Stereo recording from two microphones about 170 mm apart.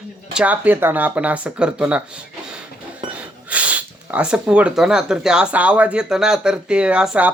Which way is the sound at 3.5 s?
10° right (ahead or behind).